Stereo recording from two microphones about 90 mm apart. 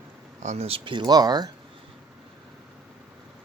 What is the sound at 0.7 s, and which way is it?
Speech, 65° right (ahead or behind).